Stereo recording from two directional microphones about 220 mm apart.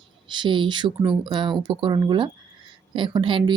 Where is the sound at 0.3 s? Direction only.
20° right (ahead or behind).